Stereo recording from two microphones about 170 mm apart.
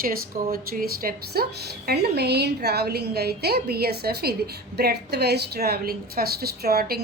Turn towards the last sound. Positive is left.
turn(degrees=-65)  # may be behind; listen again after turning